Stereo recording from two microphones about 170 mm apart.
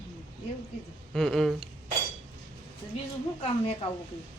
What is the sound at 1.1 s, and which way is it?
Speech, centre (ahead or behind).